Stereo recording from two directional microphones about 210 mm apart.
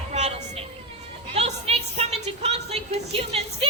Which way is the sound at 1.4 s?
30° right (ahead or behind).